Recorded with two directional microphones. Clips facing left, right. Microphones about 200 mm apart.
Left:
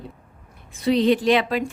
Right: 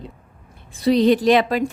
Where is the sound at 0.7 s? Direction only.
40° right (ahead or behind).